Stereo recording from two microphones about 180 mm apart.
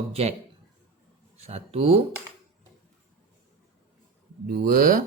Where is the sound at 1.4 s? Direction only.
35° right (ahead or behind).